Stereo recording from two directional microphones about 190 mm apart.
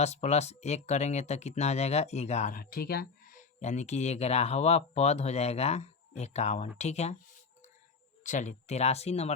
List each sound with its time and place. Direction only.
0.0 s speech: 35° left (ahead or behind)
8.2 s speech: 40° left (ahead or behind)